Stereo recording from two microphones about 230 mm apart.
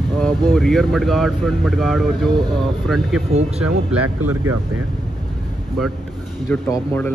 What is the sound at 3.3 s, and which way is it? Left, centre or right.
Speech, right.